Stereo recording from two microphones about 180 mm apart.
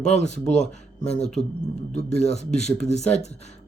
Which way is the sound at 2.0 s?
40° left (ahead or behind).